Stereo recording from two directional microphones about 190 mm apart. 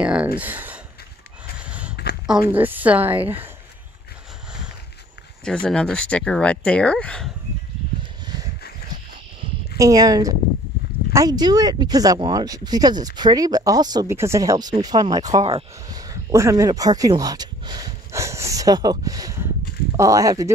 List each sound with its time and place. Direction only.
0.0 s a sound: 5° right (ahead or behind)
0.4 s speech: 10° right (ahead or behind)
1.6 s horse: 5° right (ahead or behind)
2.5 s speech: 10° right (ahead or behind)
5.4 s speech: 5° left (ahead or behind)
9.8 s speech: 20° right (ahead or behind)